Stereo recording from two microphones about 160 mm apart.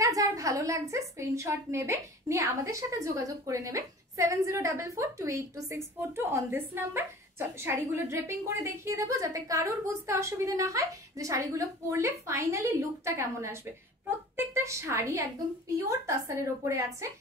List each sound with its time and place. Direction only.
0.0 s a woman's voice: 20° right (ahead or behind)